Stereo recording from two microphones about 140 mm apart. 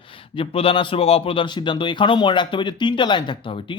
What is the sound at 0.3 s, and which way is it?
Speech, 40° left (ahead or behind).